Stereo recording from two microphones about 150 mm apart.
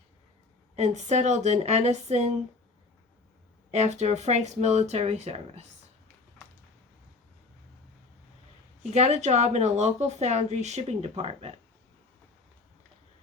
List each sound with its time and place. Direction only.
0.8 s speech: 50° right (ahead or behind)
3.7 s speech: 50° right (ahead or behind)
8.9 s speech: 50° right (ahead or behind)